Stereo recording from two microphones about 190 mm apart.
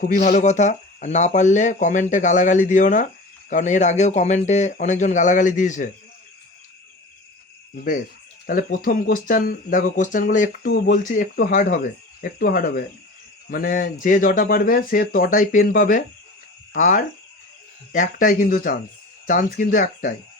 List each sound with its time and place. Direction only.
0.0 s speech: 40° left (ahead or behind)
8.4 s speech: 50° left (ahead or behind)
10.7 s speech: 60° left (ahead or behind)